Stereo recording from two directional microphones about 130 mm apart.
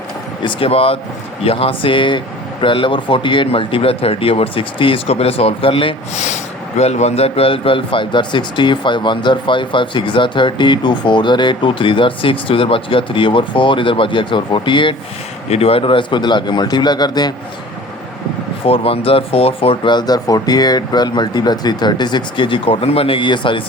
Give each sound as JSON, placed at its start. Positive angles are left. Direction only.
{"t": 0.4, "sound": "speech", "side_deg": 45}
{"t": 6.1, "sound": "speech", "side_deg": 60}
{"t": 15.4, "sound": "speech", "side_deg": 50}
{"t": 18.6, "sound": "speech", "side_deg": 45}